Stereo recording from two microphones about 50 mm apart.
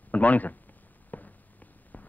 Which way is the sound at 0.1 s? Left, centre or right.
Left.